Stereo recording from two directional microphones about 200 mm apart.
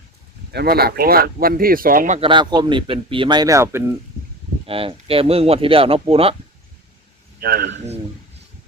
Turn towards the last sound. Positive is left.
turn(degrees=-50)  # may be behind; listen again after turning